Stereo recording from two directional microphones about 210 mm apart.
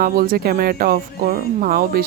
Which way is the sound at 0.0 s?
45° right (ahead or behind).